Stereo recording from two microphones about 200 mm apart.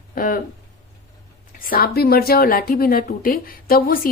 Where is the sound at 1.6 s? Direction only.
45° left (ahead or behind).